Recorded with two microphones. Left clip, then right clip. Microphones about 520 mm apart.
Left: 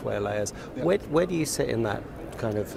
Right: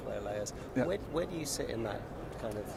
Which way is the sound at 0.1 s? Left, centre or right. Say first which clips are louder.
Left 9 dB; left.